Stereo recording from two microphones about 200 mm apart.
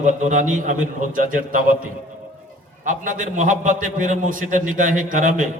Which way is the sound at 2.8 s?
40° right (ahead or behind).